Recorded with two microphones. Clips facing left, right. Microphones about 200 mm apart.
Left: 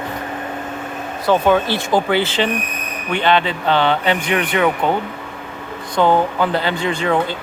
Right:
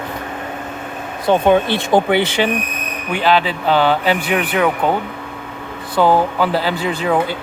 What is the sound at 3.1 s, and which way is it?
Speech, 5° right (ahead or behind).